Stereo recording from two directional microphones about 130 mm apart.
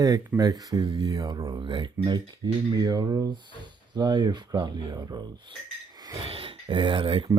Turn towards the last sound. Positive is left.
turn(degrees=-40)  # may be behind; listen again after turning